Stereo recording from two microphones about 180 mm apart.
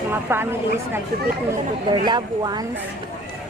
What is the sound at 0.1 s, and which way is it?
Speech, 10° right (ahead or behind).